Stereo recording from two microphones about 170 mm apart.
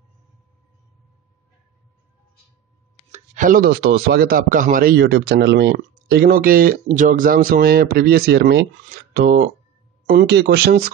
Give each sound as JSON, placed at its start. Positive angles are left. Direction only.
{"t": 3.1, "sound": "speech", "side_deg": -50}
{"t": 10.3, "sound": "speech", "side_deg": -70}